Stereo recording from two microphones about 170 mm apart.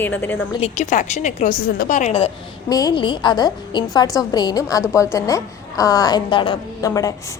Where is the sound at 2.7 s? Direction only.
20° left (ahead or behind).